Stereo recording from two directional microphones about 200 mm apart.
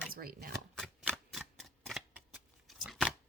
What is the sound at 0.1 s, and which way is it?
Speech, 45° right (ahead or behind).